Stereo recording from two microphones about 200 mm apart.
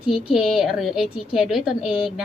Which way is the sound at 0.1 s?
Centre (ahead or behind).